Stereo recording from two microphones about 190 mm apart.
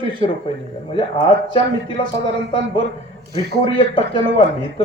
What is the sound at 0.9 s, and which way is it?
Speech, 30° left (ahead or behind).